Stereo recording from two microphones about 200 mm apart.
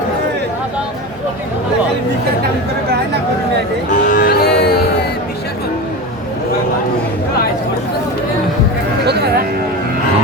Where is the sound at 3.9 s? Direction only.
45° left (ahead or behind).